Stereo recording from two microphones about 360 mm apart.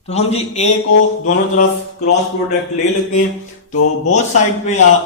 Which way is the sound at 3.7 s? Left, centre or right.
Left.